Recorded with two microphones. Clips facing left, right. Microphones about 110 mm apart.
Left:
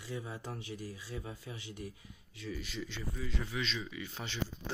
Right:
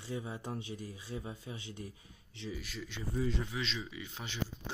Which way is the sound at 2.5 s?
5° right (ahead or behind).